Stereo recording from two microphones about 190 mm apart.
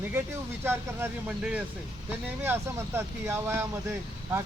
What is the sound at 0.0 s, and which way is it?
Speech, 10° right (ahead or behind).